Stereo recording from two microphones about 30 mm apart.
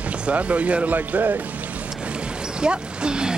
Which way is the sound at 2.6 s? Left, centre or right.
Right.